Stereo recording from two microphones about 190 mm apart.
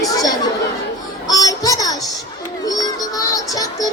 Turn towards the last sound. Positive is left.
turn(degrees=20)  # may be behind; listen again after turning